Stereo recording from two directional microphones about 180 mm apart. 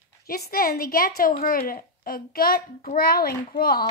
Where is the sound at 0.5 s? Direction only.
55° left (ahead or behind).